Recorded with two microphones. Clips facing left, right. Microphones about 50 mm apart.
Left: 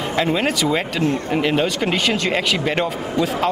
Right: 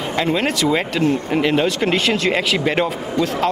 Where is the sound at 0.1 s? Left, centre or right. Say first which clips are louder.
Even; centre.